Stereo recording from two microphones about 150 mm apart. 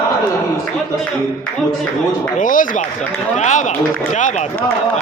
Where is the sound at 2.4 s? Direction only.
65° left (ahead or behind).